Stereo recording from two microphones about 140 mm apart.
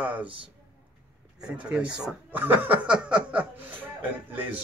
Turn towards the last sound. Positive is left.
turn(degrees=-10)  # may be behind; listen again after turning